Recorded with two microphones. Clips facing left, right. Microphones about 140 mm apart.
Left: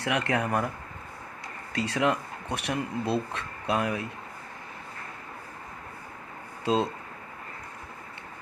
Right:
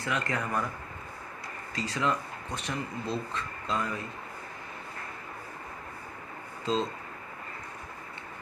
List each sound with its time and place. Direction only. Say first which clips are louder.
0.0 s speech: left 5 dB; 65° left (ahead or behind)
1.7 s speech: left 4 dB; 65° left (ahead or behind)
6.7 s speech: left 4 dB; 65° left (ahead or behind)